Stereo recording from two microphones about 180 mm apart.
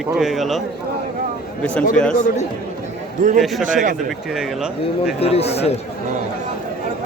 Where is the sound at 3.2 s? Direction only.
45° right (ahead or behind).